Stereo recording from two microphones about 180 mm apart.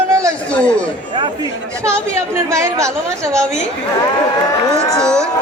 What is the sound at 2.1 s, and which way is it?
Speech, 15° right (ahead or behind).